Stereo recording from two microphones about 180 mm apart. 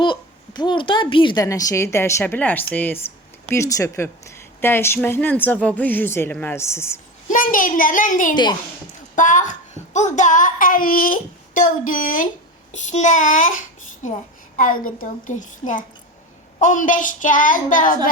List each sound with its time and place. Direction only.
0.0 s speech: 25° left (ahead or behind)
7.3 s a child's voice: 50° left (ahead or behind)
12.9 s child singing: 45° left (ahead or behind)
14.5 s a child's voice: 50° left (ahead or behind)